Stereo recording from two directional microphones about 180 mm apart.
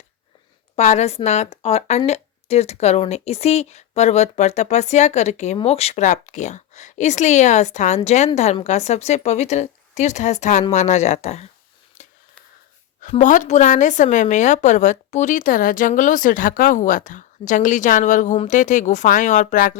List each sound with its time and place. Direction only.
0.8 s a woman's voice: 40° left (ahead or behind)
12.0 s whispering: 40° left (ahead or behind)
13.0 s speech: 45° left (ahead or behind)